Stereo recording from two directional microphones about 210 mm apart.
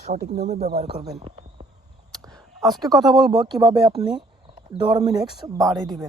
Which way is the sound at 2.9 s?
Centre (ahead or behind).